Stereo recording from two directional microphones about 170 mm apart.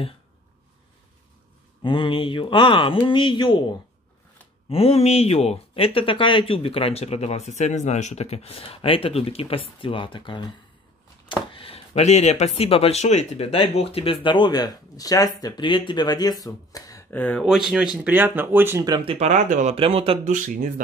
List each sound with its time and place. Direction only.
1.8 s speech: 30° left (ahead or behind); by 17.5 s 10° left (ahead or behind)
17.5 s speech: 5° right (ahead or behind)
18.9 s speech: 35° right (ahead or behind)
20.2 s speech: 50° right (ahead or behind)